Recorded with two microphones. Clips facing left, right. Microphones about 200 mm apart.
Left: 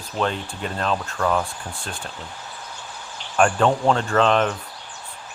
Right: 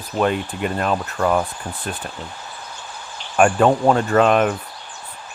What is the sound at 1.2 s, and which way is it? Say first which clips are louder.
Speech: right 3 dB; 20° right (ahead or behind).